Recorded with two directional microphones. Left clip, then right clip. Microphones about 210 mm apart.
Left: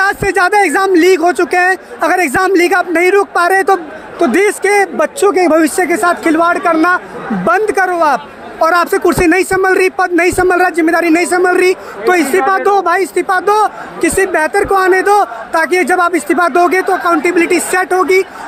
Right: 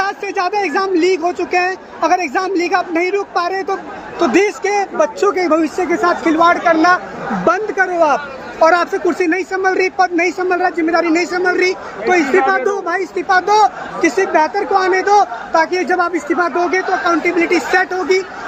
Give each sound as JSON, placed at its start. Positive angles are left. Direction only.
{"t": 0.0, "sound": "a man's voice", "side_deg": 60}